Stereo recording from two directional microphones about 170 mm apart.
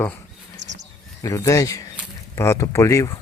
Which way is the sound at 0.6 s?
90° right.